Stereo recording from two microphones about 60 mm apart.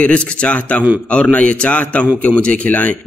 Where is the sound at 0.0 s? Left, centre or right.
Left.